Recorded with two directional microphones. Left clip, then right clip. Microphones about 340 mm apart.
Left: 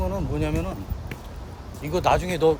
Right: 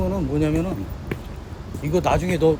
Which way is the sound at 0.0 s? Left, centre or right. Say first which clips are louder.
Right 4 dB; centre.